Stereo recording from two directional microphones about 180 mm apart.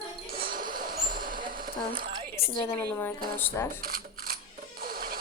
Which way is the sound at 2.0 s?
30° right (ahead or behind).